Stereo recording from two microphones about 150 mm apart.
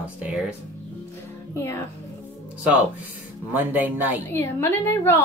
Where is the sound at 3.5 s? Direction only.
10° right (ahead or behind).